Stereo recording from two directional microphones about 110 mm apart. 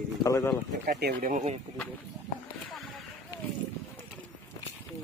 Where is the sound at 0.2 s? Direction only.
30° left (ahead or behind).